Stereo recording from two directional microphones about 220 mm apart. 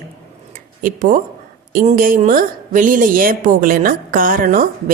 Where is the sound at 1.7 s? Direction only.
40° right (ahead or behind).